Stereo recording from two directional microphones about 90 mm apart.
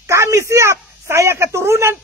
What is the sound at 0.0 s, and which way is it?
Speech, 35° right (ahead or behind).